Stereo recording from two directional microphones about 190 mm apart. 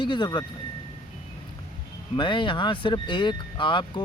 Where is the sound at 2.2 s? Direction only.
25° left (ahead or behind).